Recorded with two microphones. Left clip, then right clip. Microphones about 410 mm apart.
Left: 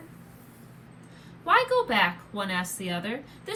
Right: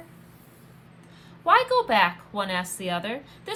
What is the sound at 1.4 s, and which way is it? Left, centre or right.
A woman's voice, centre.